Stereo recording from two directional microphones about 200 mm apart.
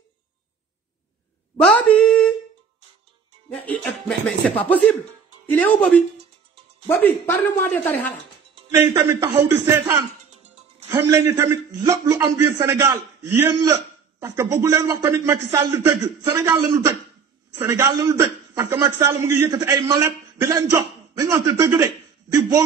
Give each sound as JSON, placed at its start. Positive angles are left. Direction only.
{"t": 1.6, "sound": "a sound", "side_deg": 5}
{"t": 3.4, "sound": "speech", "side_deg": 5}
{"t": 8.7, "sound": "a man's voice", "side_deg": -15}
{"t": 10.3, "sound": "music", "side_deg": -35}
{"t": 10.9, "sound": "a man's voice", "side_deg": -15}